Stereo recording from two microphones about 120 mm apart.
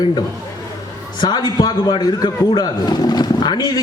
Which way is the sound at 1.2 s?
35° left (ahead or behind).